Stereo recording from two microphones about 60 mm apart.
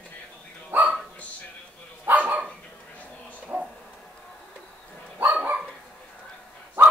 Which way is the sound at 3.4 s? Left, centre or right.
Centre.